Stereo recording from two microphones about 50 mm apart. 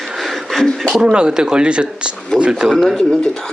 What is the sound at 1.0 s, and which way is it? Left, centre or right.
Speech, centre.